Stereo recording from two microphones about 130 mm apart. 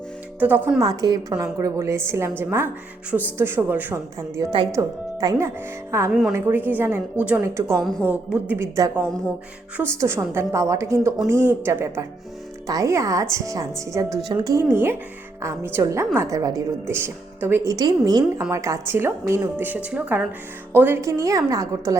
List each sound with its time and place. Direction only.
0.3 s speech: 15° right (ahead or behind)
0.8 s a woman's voice: 30° right (ahead or behind)
4.4 s a woman's voice: 35° right (ahead or behind)
4.7 s speech: 20° right (ahead or behind)
6.1 s a woman's voice: centre (ahead or behind)
6.3 s a woman's voice: 15° right (ahead or behind)
7.8 s a woman's voice: centre (ahead or behind)
8.0 s a woman's voice: 15° right (ahead or behind)